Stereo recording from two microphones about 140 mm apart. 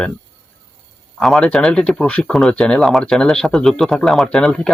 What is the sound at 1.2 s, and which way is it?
Speech, centre (ahead or behind).